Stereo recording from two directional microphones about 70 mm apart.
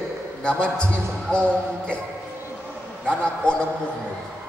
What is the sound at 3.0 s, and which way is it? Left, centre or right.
Speech, centre.